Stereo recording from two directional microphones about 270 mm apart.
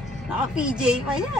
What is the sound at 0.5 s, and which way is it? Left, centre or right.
Speech, centre.